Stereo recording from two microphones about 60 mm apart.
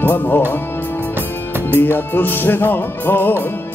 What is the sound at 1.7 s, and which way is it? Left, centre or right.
Music, left.